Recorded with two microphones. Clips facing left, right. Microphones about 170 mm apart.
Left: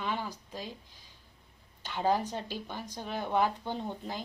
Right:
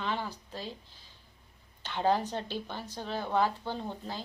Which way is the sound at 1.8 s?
10° left (ahead or behind).